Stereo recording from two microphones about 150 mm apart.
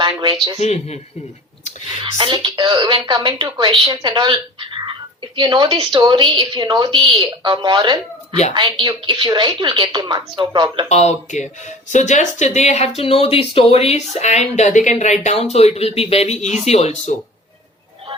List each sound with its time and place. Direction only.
0.0 s a man's voice: 30° right (ahead or behind)
0.6 s speech: 45° left (ahead or behind)
2.0 s a woman's voice: 35° right (ahead or behind)
5.4 s a woman's voice: 30° right (ahead or behind)
10.8 s speech: 50° left (ahead or behind)